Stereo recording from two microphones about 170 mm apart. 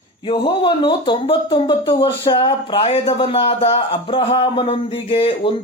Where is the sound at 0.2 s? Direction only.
30° left (ahead or behind).